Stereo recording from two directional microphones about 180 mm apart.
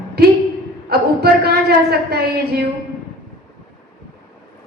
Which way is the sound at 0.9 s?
60° right (ahead or behind).